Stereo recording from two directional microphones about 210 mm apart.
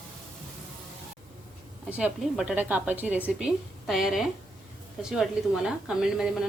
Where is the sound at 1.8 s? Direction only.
5° right (ahead or behind).